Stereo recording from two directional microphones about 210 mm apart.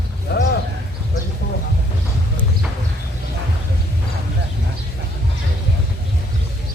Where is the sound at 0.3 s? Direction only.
50° left (ahead or behind).